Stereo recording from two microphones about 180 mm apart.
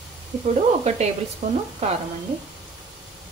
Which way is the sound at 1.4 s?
40° right (ahead or behind).